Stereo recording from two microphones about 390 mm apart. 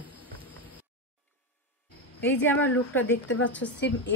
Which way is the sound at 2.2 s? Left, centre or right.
Centre.